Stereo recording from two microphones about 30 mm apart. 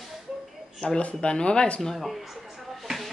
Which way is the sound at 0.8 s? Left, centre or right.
Left.